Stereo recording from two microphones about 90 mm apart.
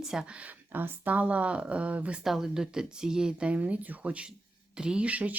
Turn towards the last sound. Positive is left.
turn(degrees=-15)  # may be behind; listen again after turning